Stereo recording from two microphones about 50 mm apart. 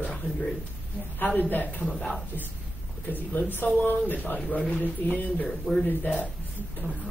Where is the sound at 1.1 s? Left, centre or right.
Left.